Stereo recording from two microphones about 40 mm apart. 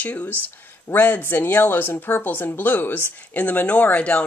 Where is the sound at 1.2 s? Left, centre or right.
Left.